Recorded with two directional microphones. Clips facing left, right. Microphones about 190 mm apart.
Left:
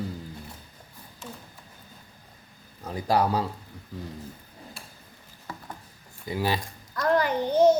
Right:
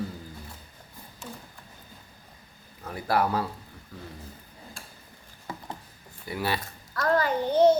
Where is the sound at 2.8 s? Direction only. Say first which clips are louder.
Left 2 dB; 15° left (ahead or behind).